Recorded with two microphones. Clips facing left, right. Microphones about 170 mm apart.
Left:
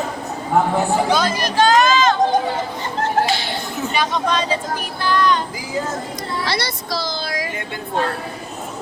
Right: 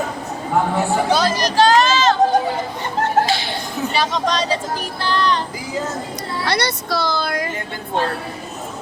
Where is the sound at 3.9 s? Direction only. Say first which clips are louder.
Even; 40° right (ahead or behind).